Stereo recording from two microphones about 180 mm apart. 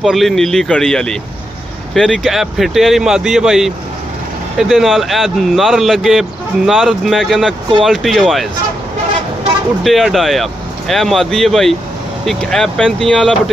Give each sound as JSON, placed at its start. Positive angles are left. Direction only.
{"t": 0.0, "sound": "speech", "side_deg": 0}
{"t": 9.8, "sound": "speech", "side_deg": 0}